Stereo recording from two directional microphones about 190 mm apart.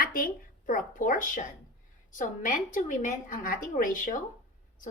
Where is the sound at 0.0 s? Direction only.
50° left (ahead or behind).